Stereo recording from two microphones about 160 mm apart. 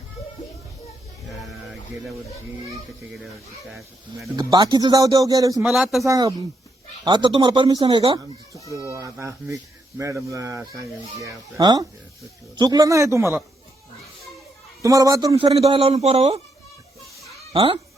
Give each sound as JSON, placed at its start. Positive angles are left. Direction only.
{"t": 1.4, "sound": "a sound", "side_deg": 0}
{"t": 3.7, "sound": "speech", "side_deg": 0}
{"t": 4.4, "sound": "speech", "side_deg": -25}
{"t": 5.6, "sound": "speech", "side_deg": 0}
{"t": 6.1, "sound": "speech", "side_deg": -20}
{"t": 14.8, "sound": "speech", "side_deg": -20}
{"t": 15.4, "sound": "a man's voice", "side_deg": -40}
{"t": 17.5, "sound": "speech", "side_deg": -35}